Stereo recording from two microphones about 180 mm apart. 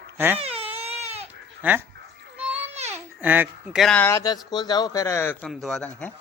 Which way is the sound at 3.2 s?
10° right (ahead or behind).